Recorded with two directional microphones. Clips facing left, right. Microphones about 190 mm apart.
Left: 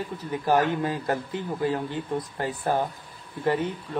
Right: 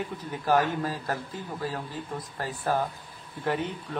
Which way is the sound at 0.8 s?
20° left (ahead or behind).